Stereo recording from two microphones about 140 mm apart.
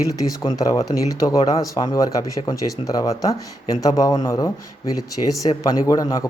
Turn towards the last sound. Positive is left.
turn(degrees=25)  # may be behind; listen again after turning